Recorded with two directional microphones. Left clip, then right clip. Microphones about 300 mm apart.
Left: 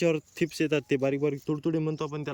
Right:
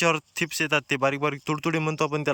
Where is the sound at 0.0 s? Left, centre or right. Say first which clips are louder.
Right 3 dB; centre.